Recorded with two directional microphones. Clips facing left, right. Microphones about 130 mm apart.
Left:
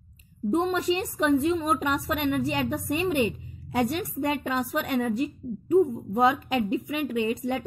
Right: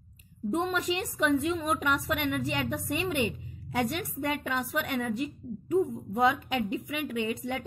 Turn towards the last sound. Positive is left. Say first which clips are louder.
# left 5 dB
turn(degrees=40)  # may be behind; listen again after turning